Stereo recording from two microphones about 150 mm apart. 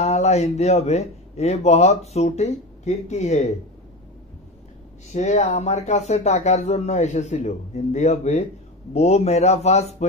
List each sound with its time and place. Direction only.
0.0 s speech: 45° left (ahead or behind)
5.1 s speech: 50° left (ahead or behind)